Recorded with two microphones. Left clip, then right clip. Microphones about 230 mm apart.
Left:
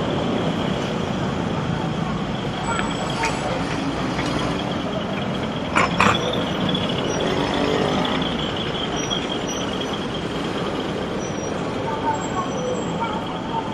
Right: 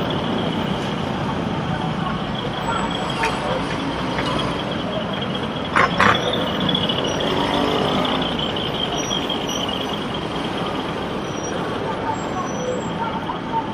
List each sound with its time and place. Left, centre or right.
5.8 s mechanisms: right